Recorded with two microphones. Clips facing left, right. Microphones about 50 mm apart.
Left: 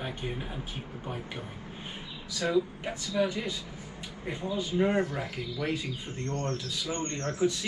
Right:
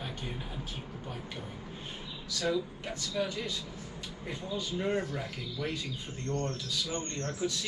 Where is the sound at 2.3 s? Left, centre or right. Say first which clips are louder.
Left 4 dB; centre.